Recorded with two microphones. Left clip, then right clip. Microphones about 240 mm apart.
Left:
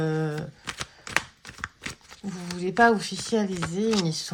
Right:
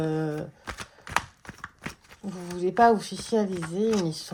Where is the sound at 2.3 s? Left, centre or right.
Centre.